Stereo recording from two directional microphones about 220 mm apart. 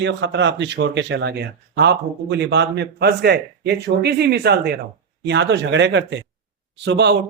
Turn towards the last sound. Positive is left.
turn(degrees=-50)  # may be behind; listen again after turning